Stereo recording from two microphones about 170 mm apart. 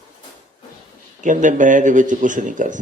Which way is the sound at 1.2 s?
50° right (ahead or behind).